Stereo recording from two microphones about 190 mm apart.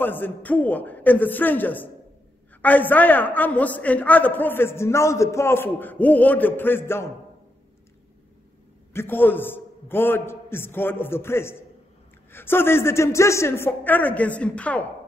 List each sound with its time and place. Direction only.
0.0 s a man's voice: 10° left (ahead or behind)
8.9 s a man's voice: 10° left (ahead or behind)